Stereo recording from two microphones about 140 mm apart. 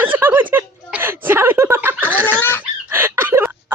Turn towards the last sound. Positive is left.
turn(degrees=-15)  # may be behind; listen again after turning